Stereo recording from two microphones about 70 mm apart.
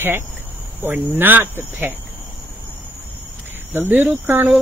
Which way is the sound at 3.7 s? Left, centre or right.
Right.